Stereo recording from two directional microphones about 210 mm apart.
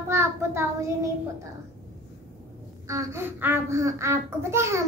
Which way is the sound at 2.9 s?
15° right (ahead or behind).